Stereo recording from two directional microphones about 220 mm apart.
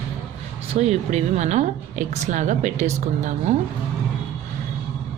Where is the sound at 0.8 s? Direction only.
30° right (ahead or behind).